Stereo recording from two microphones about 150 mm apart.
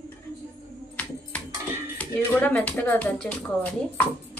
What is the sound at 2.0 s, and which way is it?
Speech, 10° left (ahead or behind).